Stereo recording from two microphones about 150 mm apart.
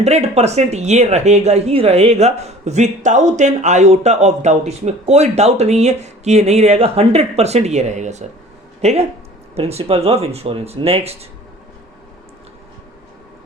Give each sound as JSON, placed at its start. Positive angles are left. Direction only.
{"t": 0.0, "sound": "speech", "side_deg": -45}